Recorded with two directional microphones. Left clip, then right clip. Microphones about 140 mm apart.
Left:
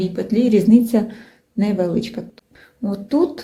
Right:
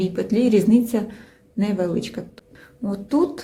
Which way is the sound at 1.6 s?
Centre (ahead or behind).